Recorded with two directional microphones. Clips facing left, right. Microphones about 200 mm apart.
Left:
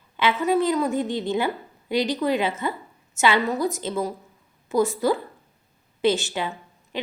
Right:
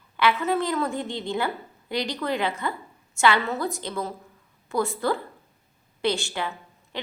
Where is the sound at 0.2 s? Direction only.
20° left (ahead or behind).